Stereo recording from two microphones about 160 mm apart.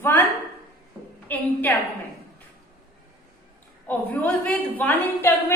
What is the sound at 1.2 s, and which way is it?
Speech, 10° left (ahead or behind).